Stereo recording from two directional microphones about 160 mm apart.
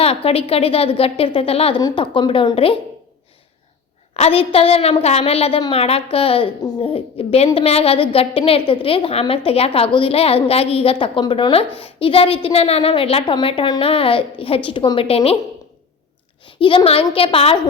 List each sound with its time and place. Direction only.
0.0 s a woman's voice: 40° left (ahead or behind)
4.1 s a woman's voice: 40° left (ahead or behind)
16.6 s a woman's voice: 35° left (ahead or behind)